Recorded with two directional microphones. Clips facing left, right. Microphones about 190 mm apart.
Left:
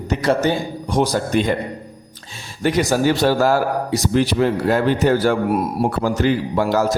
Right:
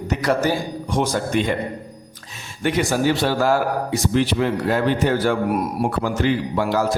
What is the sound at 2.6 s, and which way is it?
A man's voice, 40° left (ahead or behind).